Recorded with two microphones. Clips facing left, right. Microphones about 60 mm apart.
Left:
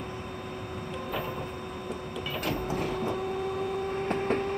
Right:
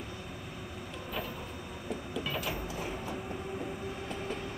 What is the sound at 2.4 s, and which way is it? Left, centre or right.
Vehicle, left.